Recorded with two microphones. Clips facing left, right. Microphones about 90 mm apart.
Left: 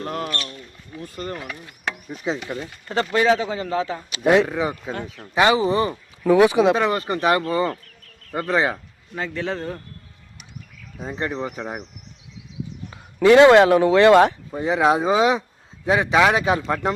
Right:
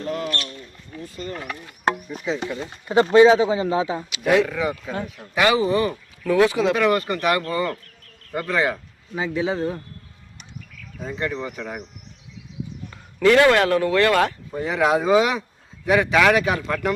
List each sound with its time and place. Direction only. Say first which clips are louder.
0.9 s a sound: left 1 dB; 10° left (ahead or behind)
1.9 s a sound: right 7 dB; 40° right (ahead or behind)
2.8 s speech: right 6 dB; 15° right (ahead or behind)
4.1 s speech: left 3 dB; 30° left (ahead or behind)
4.9 s speech: right 2 dB; 10° right (ahead or behind)
5.3 s speech: left 1 dB; 25° left (ahead or behind)
9.1 s speech: right 3 dB; 10° right (ahead or behind)
11.0 s speech: left 1 dB; 25° left (ahead or behind)
13.2 s speech: left 4 dB; 20° left (ahead or behind)